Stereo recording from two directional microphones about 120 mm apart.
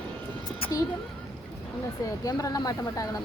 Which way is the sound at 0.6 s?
50° left (ahead or behind).